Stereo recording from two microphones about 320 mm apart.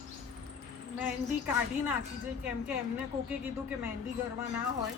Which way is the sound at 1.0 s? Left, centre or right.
Centre.